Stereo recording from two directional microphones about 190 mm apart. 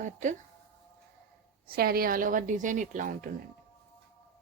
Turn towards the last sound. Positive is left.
turn(degrees=-45)  # may be behind; listen again after turning